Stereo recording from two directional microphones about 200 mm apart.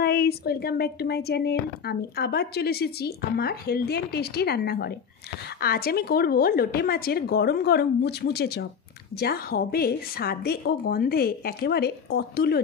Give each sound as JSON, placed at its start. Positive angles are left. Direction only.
{"t": 0.0, "sound": "speech", "side_deg": 55}